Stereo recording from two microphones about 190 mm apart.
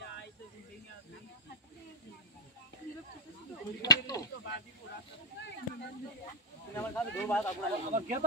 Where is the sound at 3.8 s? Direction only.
20° left (ahead or behind).